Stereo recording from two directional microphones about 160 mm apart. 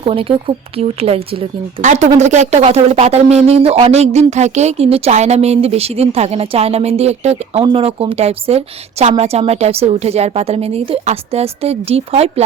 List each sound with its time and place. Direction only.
0.0 s speech: 35° right (ahead or behind)